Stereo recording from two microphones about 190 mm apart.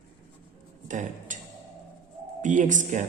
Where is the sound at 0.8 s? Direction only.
40° right (ahead or behind).